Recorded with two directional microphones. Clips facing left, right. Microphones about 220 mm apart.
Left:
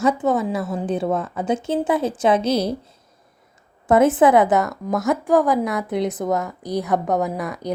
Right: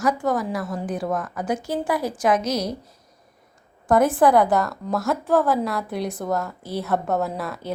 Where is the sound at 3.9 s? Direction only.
20° left (ahead or behind).